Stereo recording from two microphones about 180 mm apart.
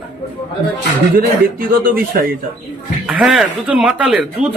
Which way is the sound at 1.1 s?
50° right (ahead or behind).